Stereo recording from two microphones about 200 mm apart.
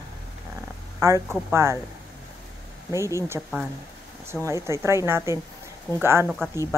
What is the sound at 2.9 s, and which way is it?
A woman's voice, 15° right (ahead or behind).